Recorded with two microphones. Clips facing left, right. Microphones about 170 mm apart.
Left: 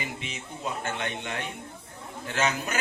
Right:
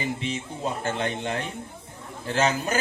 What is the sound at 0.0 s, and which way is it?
A man's voice, 30° right (ahead or behind).